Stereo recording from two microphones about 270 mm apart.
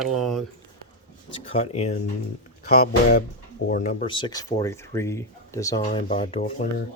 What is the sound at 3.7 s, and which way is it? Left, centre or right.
Speech, left.